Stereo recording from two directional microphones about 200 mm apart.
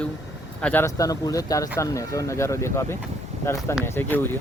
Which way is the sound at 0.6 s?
10° left (ahead or behind).